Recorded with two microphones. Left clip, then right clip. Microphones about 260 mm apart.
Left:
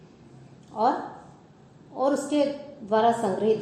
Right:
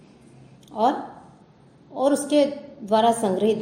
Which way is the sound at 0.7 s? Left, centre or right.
Right.